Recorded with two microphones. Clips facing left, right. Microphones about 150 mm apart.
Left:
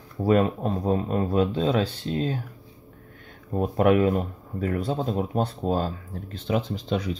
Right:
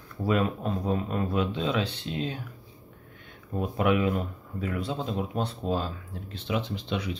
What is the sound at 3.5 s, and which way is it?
Speech, 40° left (ahead or behind).